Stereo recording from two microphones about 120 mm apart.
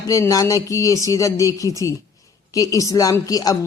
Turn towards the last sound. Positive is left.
turn(degrees=30)  # may be behind; listen again after turning